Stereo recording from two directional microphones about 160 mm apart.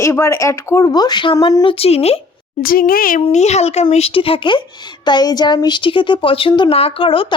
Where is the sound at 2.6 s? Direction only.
65° left (ahead or behind).